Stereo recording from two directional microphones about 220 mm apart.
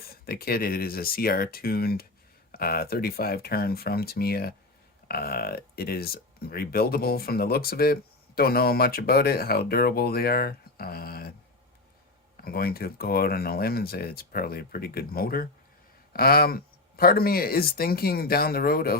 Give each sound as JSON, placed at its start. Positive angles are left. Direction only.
{"t": 0.1, "sound": "speech", "side_deg": 45}
{"t": 12.4, "sound": "speech", "side_deg": 45}